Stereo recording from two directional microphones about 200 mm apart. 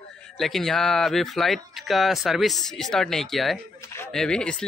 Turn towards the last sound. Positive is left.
turn(degrees=5)  # may be behind; listen again after turning